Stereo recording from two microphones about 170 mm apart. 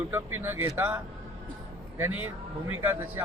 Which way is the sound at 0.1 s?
15° right (ahead or behind).